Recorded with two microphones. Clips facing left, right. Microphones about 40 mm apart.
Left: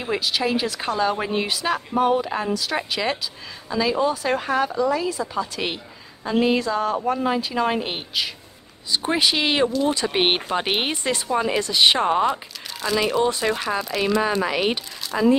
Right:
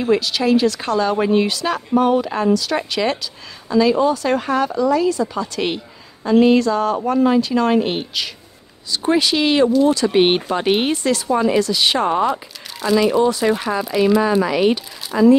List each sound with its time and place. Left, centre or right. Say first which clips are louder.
0.0 s speech: right 6 dB; centre
8.9 s speech: right 4 dB; centre
11.3 s speech: right 5 dB; centre
11.6 s speech: right 1 dB; left
12.1 s speech: right 2 dB; centre
14.4 s speech: right 6 dB; centre
15.1 s speech: right 6 dB; centre